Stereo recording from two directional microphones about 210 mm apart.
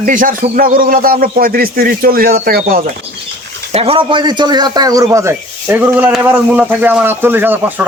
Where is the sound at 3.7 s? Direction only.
30° right (ahead or behind); by 7.9 s 10° right (ahead or behind).